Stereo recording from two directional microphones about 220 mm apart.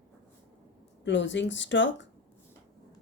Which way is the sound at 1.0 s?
55° left (ahead or behind).